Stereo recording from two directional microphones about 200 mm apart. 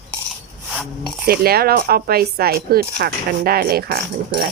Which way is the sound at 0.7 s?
Centre (ahead or behind).